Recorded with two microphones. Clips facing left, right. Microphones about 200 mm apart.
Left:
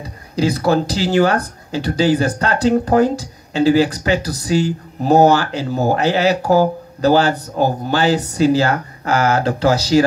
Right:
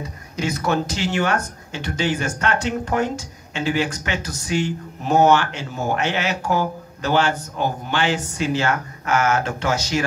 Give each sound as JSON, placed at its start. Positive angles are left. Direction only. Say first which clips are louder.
{"t": 0.0, "sound": "speech", "louder": "left 7 dB", "side_deg": 35}